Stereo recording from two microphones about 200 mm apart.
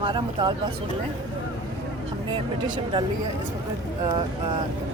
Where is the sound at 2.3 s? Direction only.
25° right (ahead or behind).